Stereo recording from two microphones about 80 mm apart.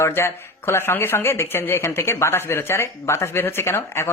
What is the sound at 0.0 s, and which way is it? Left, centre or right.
Speech, left.